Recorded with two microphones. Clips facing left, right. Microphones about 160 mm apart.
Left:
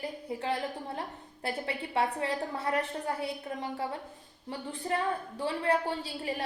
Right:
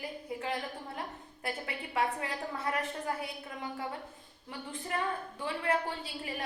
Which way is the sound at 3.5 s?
30° left (ahead or behind).